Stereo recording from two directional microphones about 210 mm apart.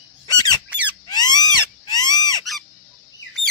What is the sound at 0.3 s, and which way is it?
Squeak, 20° left (ahead or behind).